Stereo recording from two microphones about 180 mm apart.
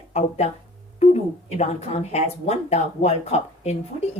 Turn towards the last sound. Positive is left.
turn(degrees=35)  # may be behind; listen again after turning